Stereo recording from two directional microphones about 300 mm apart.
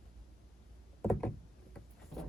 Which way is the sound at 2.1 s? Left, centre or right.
Centre.